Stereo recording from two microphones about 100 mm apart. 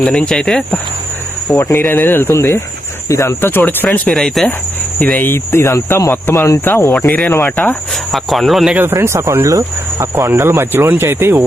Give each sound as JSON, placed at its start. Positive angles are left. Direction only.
{"t": 0.0, "sound": "speech", "side_deg": 10}
{"t": 1.5, "sound": "speech", "side_deg": 25}
{"t": 4.1, "sound": "speech", "side_deg": 0}
{"t": 4.9, "sound": "speech", "side_deg": 15}
{"t": 7.9, "sound": "speech", "side_deg": 0}
{"t": 8.7, "sound": "speech", "side_deg": -25}